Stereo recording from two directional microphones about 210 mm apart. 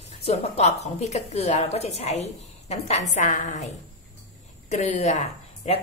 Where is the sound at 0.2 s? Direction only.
30° left (ahead or behind).